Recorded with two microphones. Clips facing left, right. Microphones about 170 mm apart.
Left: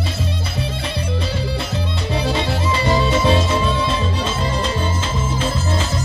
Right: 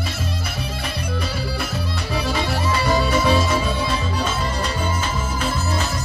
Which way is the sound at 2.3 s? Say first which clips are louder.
Left 2 dB; 25° left (ahead or behind).